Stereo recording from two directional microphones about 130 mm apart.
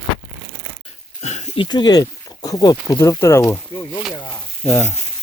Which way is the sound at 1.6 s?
35° left (ahead or behind).